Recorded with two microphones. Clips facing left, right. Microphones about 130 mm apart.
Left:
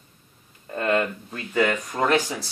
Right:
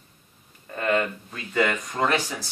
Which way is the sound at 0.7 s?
30° left (ahead or behind).